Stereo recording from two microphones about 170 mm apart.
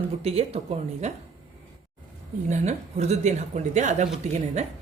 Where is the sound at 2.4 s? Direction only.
40° right (ahead or behind).